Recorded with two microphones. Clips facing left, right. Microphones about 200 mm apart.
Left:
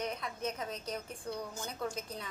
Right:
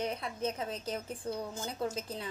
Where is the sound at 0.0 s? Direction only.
30° right (ahead or behind).